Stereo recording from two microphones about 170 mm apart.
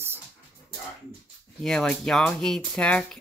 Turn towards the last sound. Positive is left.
turn(degrees=5)  # may be behind; listen again after turning